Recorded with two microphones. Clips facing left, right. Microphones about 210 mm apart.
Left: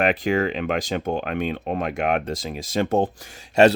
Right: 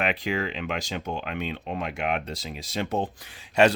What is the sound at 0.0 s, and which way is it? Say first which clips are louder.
Speech: left 7 dB; 45° left (ahead or behind).